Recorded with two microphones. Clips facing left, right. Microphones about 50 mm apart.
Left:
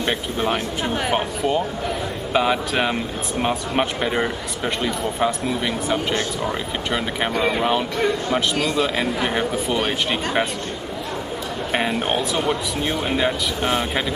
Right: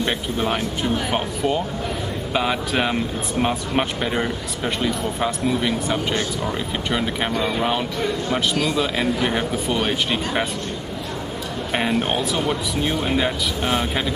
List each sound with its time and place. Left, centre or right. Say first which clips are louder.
0.0 s speech: even; centre
11.7 s speech: even; centre